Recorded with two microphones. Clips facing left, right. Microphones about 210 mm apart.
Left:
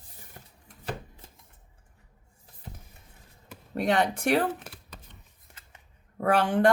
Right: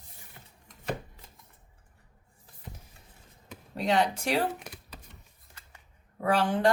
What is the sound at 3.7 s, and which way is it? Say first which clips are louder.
Speech: left 1 dB; 55° left (ahead or behind).